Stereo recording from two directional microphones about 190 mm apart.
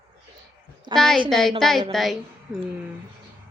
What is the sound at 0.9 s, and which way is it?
A woman's voice, centre (ahead or behind).